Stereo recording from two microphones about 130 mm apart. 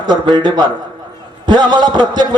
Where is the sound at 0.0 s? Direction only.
35° right (ahead or behind).